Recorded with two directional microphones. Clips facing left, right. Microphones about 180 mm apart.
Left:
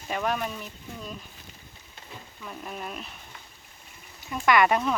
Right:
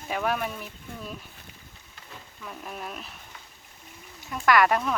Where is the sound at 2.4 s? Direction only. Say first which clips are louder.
Left 1 dB; centre (ahead or behind).